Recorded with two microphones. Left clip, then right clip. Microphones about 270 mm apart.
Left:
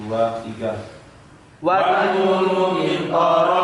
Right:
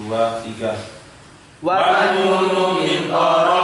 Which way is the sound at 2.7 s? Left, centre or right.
Centre.